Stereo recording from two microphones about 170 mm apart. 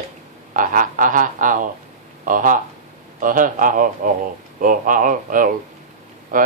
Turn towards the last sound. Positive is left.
turn(degrees=-50)  # may be behind; listen again after turning